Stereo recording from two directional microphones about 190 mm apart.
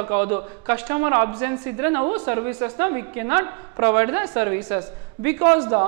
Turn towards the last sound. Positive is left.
turn(degrees=-15)  # may be behind; listen again after turning